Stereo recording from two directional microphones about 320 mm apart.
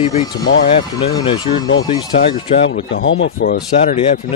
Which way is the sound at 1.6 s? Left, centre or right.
Left.